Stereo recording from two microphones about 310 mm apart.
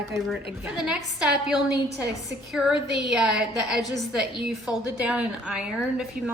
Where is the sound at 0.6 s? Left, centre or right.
Centre.